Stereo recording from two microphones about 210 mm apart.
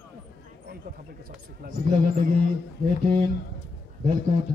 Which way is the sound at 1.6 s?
45° right (ahead or behind).